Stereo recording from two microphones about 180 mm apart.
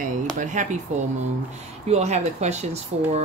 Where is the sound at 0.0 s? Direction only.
45° right (ahead or behind).